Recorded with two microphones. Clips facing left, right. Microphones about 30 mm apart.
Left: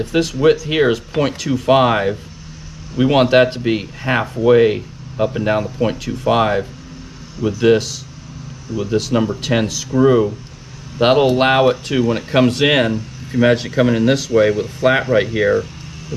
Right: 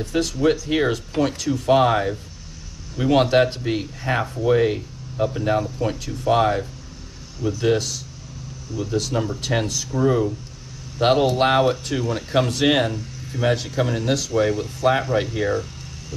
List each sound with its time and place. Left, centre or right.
0.4 s speech: left
7.6 s speech: left
11.0 s speech: left